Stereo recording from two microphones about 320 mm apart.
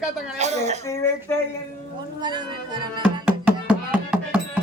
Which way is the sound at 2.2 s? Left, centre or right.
Centre.